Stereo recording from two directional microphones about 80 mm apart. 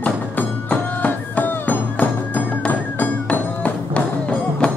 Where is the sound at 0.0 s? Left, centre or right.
Centre.